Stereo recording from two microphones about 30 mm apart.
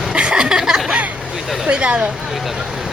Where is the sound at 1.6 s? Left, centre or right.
Right.